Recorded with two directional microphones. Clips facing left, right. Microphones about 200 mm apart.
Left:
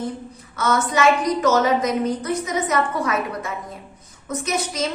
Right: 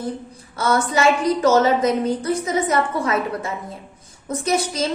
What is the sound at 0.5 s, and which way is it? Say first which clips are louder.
A woman's voice: right 1 dB; 30° right (ahead or behind).